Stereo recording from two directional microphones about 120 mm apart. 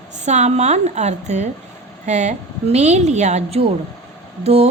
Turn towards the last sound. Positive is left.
turn(degrees=-60)  # may be behind; listen again after turning